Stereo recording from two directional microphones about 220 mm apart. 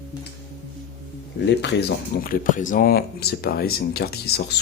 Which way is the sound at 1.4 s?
50° left (ahead or behind).